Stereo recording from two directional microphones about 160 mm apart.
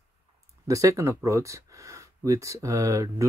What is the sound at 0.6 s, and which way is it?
Speech, 20° right (ahead or behind).